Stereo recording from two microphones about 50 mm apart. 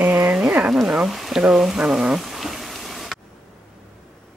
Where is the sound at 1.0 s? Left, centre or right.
Centre.